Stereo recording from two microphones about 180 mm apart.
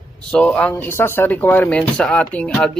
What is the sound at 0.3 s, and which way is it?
Speech, 5° left (ahead or behind).